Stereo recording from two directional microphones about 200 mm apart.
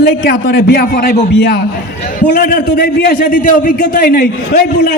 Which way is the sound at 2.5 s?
55° left (ahead or behind).